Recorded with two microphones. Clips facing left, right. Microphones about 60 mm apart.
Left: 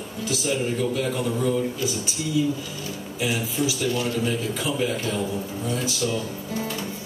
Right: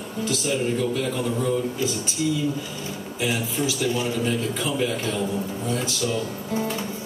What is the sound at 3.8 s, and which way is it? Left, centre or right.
Speech, centre.